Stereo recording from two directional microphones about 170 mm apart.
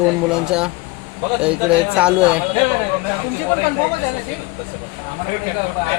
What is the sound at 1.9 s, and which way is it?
Speech, 5° right (ahead or behind).